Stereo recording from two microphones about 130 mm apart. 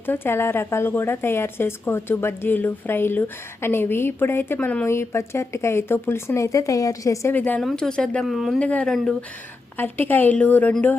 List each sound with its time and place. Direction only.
0.0 s a woman's voice: 15° left (ahead or behind); by 8.6 s centre (ahead or behind)
8.6 s a woman's voice: 10° left (ahead or behind)